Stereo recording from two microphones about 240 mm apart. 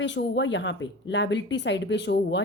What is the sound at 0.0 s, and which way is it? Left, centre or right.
A woman's voice, left.